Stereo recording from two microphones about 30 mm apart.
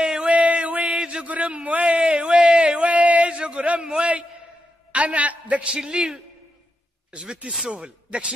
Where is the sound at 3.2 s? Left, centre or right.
Right.